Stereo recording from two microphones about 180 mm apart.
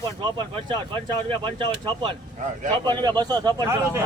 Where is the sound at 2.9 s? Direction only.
25° right (ahead or behind).